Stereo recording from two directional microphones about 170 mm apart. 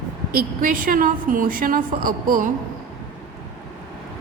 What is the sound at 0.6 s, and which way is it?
A woman's voice, 55° right (ahead or behind).